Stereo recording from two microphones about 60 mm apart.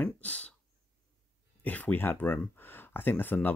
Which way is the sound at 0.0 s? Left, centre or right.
Left.